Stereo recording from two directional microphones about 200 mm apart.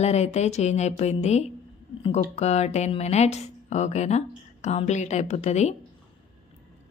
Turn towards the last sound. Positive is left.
turn(degrees=35)  # may be behind; listen again after turning